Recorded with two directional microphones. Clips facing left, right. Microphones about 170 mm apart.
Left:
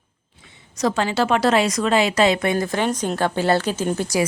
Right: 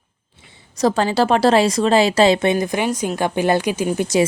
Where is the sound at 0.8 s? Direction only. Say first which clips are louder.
Right 4 dB; 35° right (ahead or behind).